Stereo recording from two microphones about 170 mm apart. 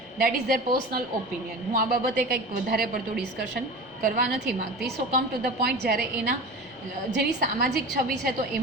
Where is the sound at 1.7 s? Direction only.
55° right (ahead or behind).